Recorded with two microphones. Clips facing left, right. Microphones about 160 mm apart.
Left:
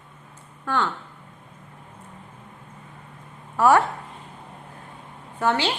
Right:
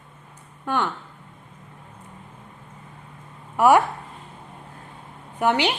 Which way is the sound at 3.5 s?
15° right (ahead or behind).